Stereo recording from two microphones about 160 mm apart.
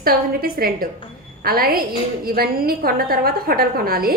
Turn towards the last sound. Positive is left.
turn(degrees=-70)  # may be behind; listen again after turning